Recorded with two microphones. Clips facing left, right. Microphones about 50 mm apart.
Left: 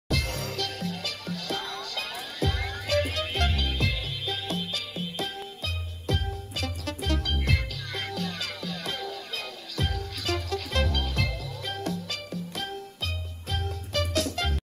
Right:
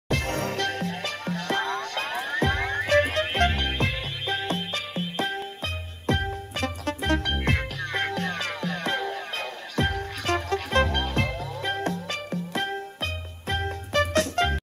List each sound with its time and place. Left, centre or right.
0.1 s music: right